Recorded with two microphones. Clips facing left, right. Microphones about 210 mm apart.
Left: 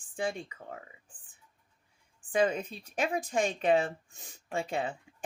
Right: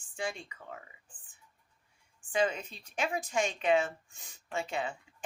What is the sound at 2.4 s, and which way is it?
Speech, 35° left (ahead or behind).